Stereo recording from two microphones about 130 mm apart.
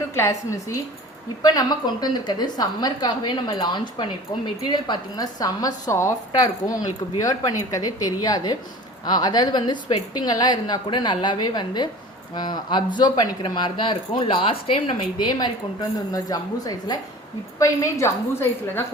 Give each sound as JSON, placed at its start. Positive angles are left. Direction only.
{"t": 0.1, "sound": "a woman's voice", "side_deg": 20}